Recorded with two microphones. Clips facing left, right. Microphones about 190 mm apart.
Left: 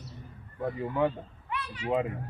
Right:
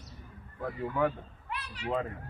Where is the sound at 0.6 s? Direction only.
25° left (ahead or behind).